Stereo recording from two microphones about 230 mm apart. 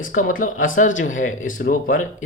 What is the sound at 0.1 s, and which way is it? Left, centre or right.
Speech, left.